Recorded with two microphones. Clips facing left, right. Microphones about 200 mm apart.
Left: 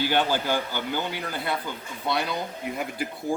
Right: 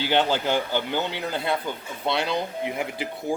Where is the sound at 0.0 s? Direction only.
20° right (ahead or behind).